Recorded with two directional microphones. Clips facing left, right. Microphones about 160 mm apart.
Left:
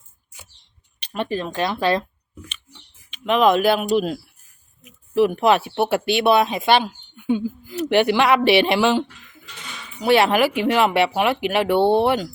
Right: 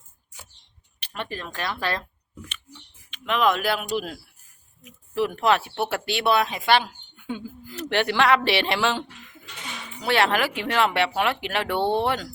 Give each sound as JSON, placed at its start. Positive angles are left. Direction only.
{"t": 0.9, "sound": "speech", "side_deg": 15}
{"t": 3.1, "sound": "speech", "side_deg": 20}